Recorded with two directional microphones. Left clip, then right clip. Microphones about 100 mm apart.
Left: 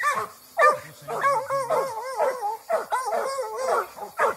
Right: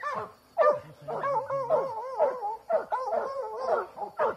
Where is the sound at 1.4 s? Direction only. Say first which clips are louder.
Left 3 dB; 20° left (ahead or behind).